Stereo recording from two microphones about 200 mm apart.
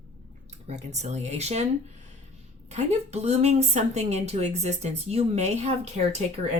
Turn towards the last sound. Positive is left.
turn(degrees=-30)  # may be behind; listen again after turning